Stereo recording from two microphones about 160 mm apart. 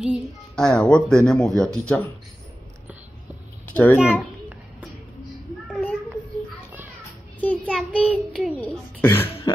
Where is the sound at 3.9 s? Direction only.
5° right (ahead or behind).